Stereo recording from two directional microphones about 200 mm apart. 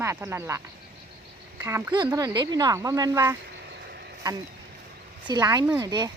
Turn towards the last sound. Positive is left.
turn(degrees=-20)  # may be behind; listen again after turning